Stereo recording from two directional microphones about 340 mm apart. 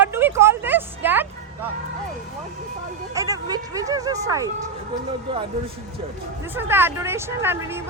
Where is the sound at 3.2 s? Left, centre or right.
Centre.